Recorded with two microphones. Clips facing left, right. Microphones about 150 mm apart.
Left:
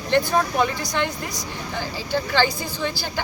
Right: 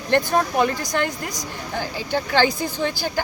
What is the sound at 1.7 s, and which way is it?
Speech, 50° right (ahead or behind).